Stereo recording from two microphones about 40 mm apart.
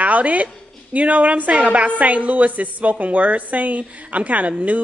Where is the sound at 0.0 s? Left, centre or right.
Right.